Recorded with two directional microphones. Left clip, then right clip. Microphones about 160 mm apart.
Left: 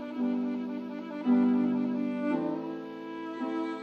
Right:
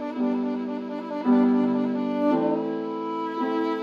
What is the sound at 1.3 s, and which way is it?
Music, 10° left (ahead or behind).